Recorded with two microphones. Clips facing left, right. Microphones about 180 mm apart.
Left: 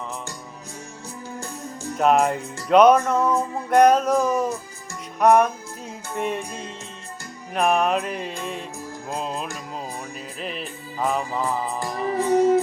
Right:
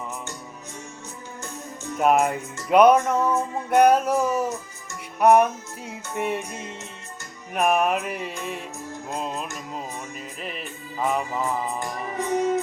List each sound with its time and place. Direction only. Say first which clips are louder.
2.0 s music: left 1 dB; 5° right (ahead or behind)
10.4 s music: left 4 dB; 5° right (ahead or behind)
11.8 s music: left 5 dB; 35° left (ahead or behind)